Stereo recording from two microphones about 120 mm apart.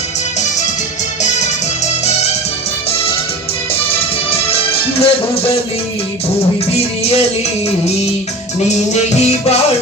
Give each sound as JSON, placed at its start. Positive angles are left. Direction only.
{"t": 4.9, "sound": "speech", "side_deg": 50}
{"t": 6.7, "sound": "music", "side_deg": 60}
{"t": 8.7, "sound": "music", "side_deg": 65}